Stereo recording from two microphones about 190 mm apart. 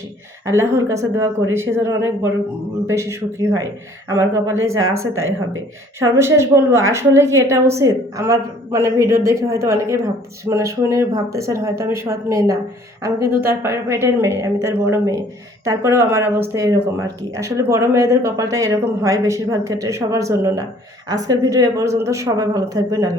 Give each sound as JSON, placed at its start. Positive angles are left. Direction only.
{"t": 0.4, "sound": "speech", "side_deg": -15}
{"t": 6.0, "sound": "speech", "side_deg": -15}